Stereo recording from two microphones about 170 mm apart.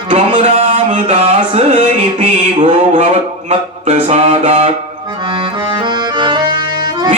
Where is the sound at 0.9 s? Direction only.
40° right (ahead or behind).